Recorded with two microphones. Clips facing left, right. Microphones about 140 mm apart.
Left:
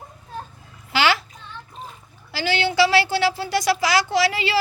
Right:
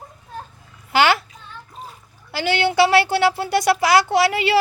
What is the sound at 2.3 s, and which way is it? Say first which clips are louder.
Speech: right 3 dB; 55° right (ahead or behind).